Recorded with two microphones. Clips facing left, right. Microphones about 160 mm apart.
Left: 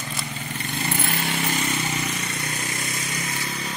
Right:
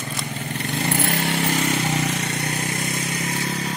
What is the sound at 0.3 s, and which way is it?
Vehicle, 60° right (ahead or behind).